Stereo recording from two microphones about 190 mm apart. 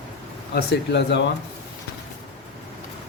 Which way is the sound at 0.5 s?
65° left (ahead or behind).